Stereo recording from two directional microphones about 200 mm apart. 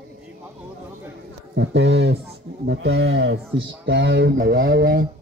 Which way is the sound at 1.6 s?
60° right (ahead or behind).